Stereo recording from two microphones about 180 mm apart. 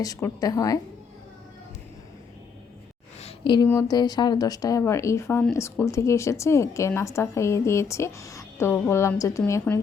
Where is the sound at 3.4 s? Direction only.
25° left (ahead or behind).